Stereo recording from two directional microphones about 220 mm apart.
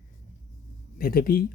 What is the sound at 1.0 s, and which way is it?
Speech, 40° left (ahead or behind).